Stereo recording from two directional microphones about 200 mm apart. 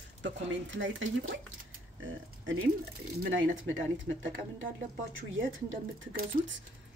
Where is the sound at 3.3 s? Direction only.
80° right.